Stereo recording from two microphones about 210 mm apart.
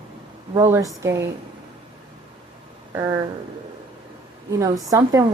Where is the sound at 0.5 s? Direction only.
15° right (ahead or behind).